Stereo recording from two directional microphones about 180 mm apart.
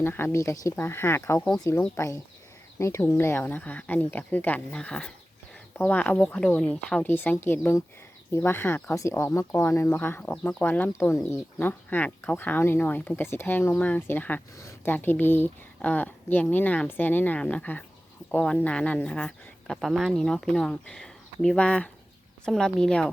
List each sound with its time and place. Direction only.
0.0 s speech: 10° left (ahead or behind)